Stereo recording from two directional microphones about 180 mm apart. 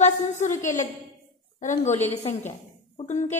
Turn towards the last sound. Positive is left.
turn(degrees=40)  # may be behind; listen again after turning